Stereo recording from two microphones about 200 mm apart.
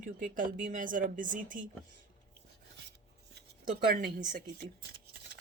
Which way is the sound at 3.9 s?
50° right (ahead or behind).